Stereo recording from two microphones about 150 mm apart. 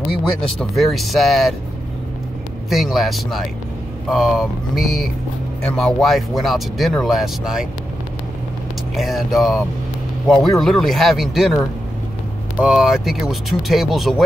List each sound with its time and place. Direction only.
0.6 s speech: centre (ahead or behind)
2.7 s speech: centre (ahead or behind)
8.9 s speech: centre (ahead or behind)